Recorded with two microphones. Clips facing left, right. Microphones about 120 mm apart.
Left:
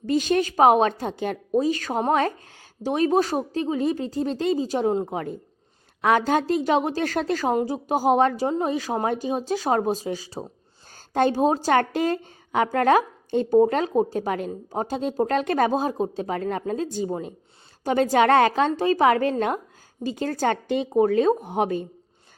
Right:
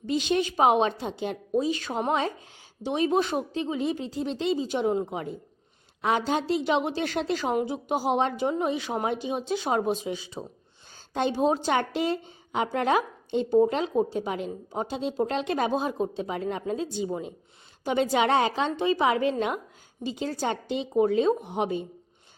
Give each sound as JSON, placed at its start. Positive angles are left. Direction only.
{"t": 0.0, "sound": "a woman's voice", "side_deg": 45}
{"t": 5.1, "sound": "a woman's voice", "side_deg": 50}